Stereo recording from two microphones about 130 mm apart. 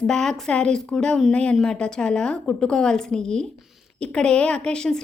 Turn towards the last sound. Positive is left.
turn(degrees=5)  # may be behind; listen again after turning